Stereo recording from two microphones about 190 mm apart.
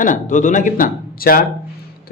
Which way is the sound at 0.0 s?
40° left (ahead or behind).